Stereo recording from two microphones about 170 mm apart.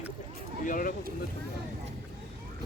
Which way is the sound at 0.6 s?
50° left (ahead or behind).